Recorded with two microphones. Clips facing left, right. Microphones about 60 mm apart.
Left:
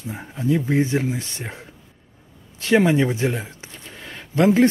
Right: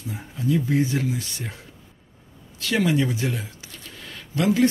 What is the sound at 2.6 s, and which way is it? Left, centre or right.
Speech, left.